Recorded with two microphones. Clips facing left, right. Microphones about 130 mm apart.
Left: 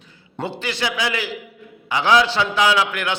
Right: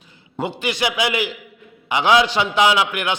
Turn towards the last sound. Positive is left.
turn(degrees=-15)  # may be behind; listen again after turning